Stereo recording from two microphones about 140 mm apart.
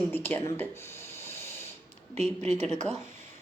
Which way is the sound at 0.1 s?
15° left (ahead or behind).